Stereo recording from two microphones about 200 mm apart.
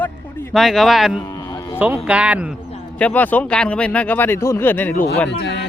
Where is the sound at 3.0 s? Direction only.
10° left (ahead or behind).